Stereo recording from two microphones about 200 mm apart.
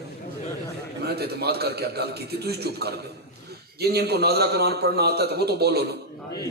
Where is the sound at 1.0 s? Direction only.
55° right (ahead or behind).